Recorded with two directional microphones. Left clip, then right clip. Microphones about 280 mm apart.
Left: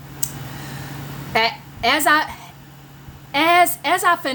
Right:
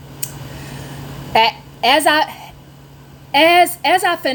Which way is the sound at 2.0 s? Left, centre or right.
Left.